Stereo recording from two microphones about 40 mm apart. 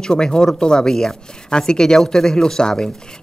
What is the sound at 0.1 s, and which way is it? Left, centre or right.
Speech, centre.